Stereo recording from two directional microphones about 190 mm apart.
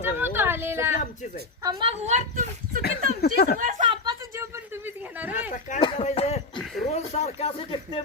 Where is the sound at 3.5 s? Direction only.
45° right (ahead or behind).